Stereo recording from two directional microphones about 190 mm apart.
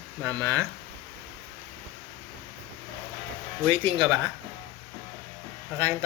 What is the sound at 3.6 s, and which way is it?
Speech, 25° right (ahead or behind).